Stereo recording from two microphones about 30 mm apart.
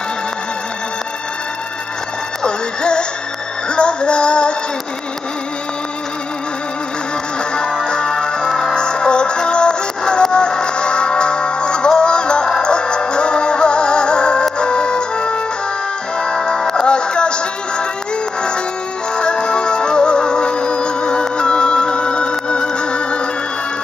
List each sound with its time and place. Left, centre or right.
2.4 s synthetic singing: left
3.6 s music: left
7.8 s music: left
16.8 s music: left
19.1 s music: left